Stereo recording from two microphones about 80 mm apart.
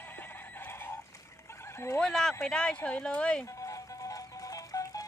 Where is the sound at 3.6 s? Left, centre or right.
Left.